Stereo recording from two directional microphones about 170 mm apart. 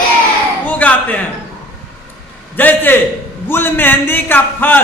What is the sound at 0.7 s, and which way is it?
Speech, 10° left (ahead or behind).